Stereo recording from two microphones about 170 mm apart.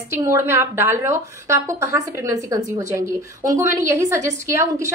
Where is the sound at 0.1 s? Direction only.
15° right (ahead or behind).